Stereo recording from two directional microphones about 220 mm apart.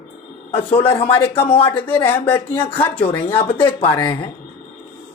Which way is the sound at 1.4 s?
25° left (ahead or behind).